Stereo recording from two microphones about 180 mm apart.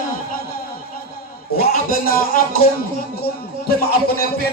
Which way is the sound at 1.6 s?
55° left (ahead or behind).